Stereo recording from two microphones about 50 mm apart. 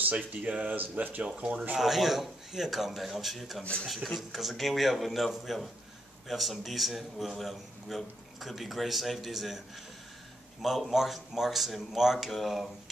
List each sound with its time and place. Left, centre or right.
0.0 s speech: right
1.2 s speech: right
1.8 s a man's voice: centre
10.9 s a man's voice: centre